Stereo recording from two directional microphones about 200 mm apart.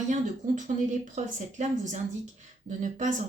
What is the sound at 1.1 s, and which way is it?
Speech, 35° right (ahead or behind).